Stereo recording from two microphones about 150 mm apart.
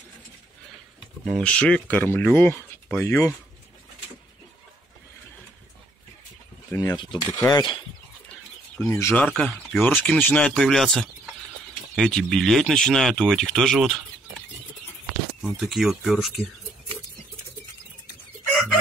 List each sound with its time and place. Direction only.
1.2 s speech: 5° left (ahead or behind)
6.7 s cutlery: 25° left (ahead or behind)
8.7 s speech: 15° left (ahead or behind)
9.3 s speech: 5° left (ahead or behind)
15.5 s speech: centre (ahead or behind)